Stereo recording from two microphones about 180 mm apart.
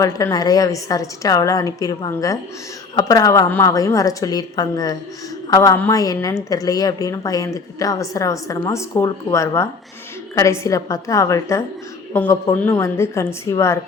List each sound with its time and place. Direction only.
0.0 s a woman's voice: 20° left (ahead or behind)